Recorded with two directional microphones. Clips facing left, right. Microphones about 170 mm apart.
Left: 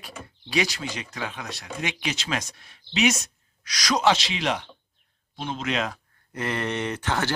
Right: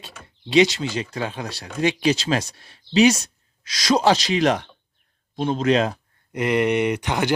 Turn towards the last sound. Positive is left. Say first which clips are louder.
# right 5 dB
turn(degrees=-15)  # may be behind; listen again after turning